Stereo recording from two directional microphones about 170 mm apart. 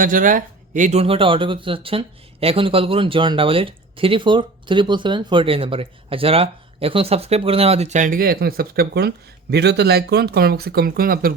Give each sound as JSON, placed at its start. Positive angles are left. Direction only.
{"t": 0.0, "sound": "speech", "side_deg": -55}